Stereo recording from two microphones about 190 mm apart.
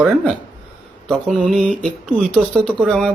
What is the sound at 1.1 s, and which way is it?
Speech, 5° left (ahead or behind).